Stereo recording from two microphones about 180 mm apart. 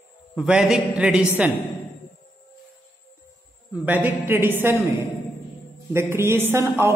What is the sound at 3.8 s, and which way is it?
Speech, 10° right (ahead or behind).